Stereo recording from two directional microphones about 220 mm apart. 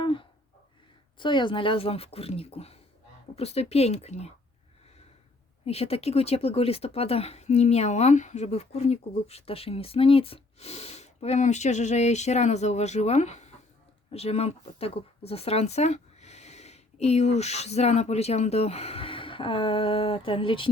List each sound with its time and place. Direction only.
0.0 s a sound: 25° left (ahead or behind)
1.2 s speech: 20° left (ahead or behind)
5.6 s speech: 25° left (ahead or behind)